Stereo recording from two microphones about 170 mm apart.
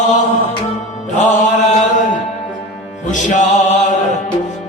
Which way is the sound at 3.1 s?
45° left (ahead or behind).